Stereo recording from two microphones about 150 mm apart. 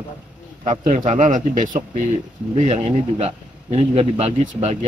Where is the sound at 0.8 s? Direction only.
55° right (ahead or behind).